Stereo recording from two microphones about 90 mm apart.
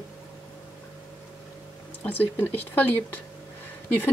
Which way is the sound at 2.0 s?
20° left (ahead or behind).